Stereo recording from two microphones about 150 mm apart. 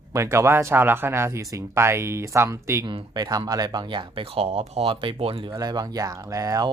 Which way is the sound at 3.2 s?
25° right (ahead or behind).